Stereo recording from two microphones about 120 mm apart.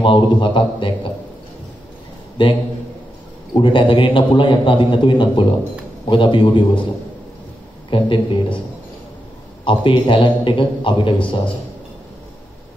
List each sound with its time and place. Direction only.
0.0 s a man's voice: 45° left (ahead or behind)
2.4 s a man's voice: 45° left (ahead or behind)
7.9 s a man's voice: 45° left (ahead or behind)
9.7 s a man's voice: 45° left (ahead or behind)